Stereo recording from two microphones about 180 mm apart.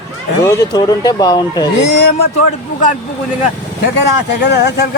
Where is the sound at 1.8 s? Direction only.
65° left (ahead or behind).